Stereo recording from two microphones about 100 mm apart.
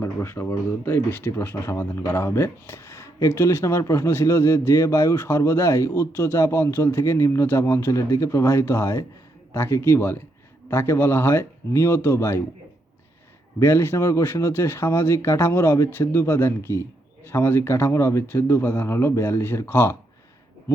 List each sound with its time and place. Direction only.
0.0 s speech: 25° left (ahead or behind)
13.6 s speech: 25° left (ahead or behind)